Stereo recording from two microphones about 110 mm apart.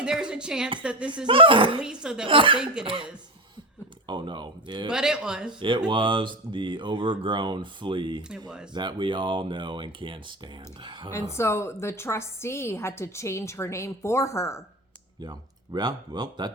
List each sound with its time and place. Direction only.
0.0 s speech: 10° right (ahead or behind)
1.3 s speech: 50° right (ahead or behind)
1.8 s speech: 5° right (ahead or behind)
2.2 s speech: 50° right (ahead or behind)
4.9 s speech: 5° right (ahead or behind)
5.5 s speech: 45° right (ahead or behind)
8.3 s speech: 5° right (ahead or behind)
8.7 s speech: 45° right (ahead or behind)
11.1 s a woman's voice: 25° left (ahead or behind)
15.2 s speech: 40° right (ahead or behind)